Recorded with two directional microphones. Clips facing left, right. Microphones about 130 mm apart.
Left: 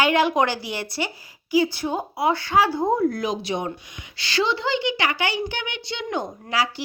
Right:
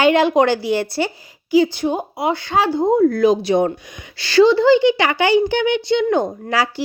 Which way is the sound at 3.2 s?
35° right (ahead or behind).